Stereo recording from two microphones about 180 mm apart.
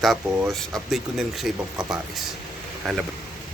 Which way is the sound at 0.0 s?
Centre (ahead or behind).